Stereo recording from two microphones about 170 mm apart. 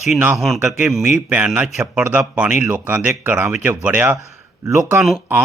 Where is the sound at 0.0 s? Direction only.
5° right (ahead or behind).